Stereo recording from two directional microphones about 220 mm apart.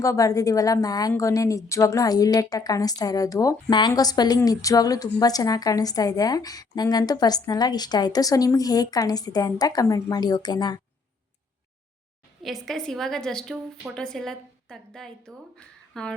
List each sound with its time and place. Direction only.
0.0 s a woman's voice: 15° left (ahead or behind)
12.4 s a woman's voice: centre (ahead or behind)